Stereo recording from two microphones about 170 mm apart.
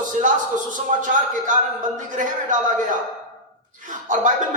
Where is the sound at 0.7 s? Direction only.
50° right (ahead or behind).